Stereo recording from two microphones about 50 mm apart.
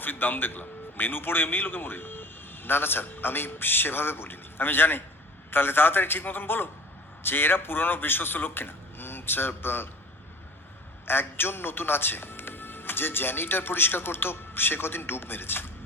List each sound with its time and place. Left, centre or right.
0.0 s a man's voice: left
11.0 s a man's voice: left